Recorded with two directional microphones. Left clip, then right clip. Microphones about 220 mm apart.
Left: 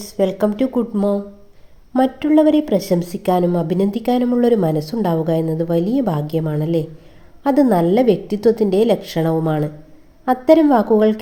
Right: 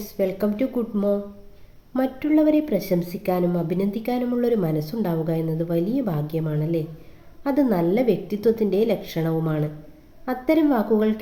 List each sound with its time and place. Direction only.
0.0 s a woman's voice: 35° left (ahead or behind)